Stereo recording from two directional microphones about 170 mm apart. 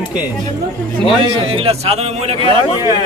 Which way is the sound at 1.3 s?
35° right (ahead or behind).